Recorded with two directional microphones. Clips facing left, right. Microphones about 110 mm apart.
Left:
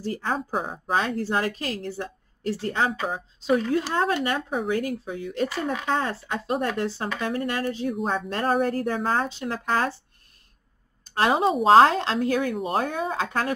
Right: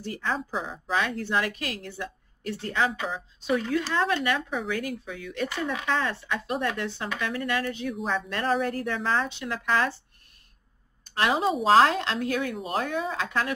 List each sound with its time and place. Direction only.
0.0 s a woman's voice: 35° left (ahead or behind)
0.9 s a woman's voice: 35° left (ahead or behind)
7.9 s a woman's voice: 50° left (ahead or behind)
11.1 s a woman's voice: 35° left (ahead or behind)